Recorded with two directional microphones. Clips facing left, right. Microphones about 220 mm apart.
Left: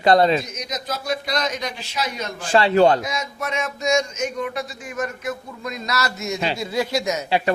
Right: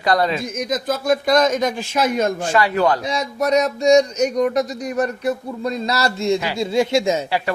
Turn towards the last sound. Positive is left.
turn(degrees=-25)  # may be behind; listen again after turning